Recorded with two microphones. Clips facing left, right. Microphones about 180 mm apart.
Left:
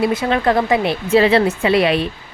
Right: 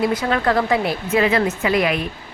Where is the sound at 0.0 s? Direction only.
25° left (ahead or behind).